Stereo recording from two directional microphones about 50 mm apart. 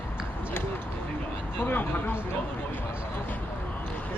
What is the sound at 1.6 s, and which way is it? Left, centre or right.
Speech, left.